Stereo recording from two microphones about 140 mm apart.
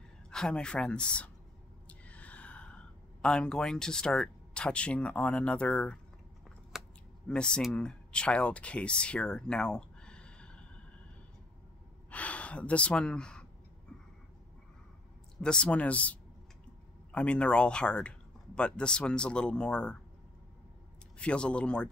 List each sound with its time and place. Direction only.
0.3 s speech: 5° left (ahead or behind)
6.7 s scissors: centre (ahead or behind)
7.2 s speech: 5° left (ahead or behind)
12.1 s speech: 10° left (ahead or behind)
15.4 s speech: 5° left (ahead or behind)
21.2 s speech: 10° left (ahead or behind)